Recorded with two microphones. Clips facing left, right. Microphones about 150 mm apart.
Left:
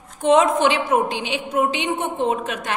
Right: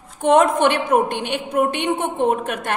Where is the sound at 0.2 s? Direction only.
60° right (ahead or behind).